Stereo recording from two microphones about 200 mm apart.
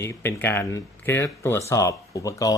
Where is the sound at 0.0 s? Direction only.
10° left (ahead or behind).